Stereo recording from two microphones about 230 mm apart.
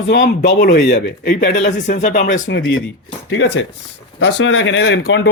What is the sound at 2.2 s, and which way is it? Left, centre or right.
Speech, left.